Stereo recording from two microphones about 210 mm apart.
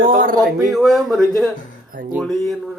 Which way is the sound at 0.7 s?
Centre (ahead or behind).